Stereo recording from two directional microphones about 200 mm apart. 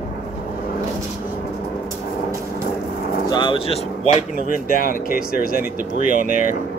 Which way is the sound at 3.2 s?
20° left (ahead or behind).